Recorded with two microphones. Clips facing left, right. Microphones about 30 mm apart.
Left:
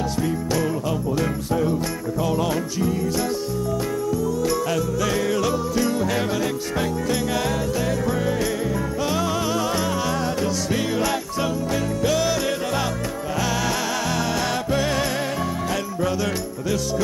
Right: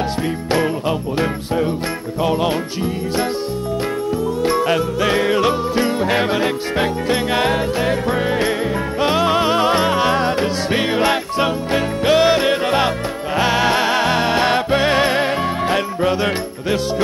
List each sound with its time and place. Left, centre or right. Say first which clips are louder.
0.5 s music: right 5 dB; right
2.2 s music: right 6 dB; right
4.4 s music: right 5 dB; right